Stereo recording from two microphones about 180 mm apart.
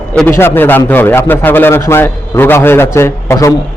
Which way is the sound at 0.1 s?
10° left (ahead or behind).